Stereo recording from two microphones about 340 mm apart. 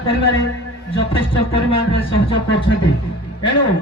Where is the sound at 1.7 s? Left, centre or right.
Centre.